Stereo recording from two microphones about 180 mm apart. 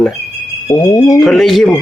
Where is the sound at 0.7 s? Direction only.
15° left (ahead or behind).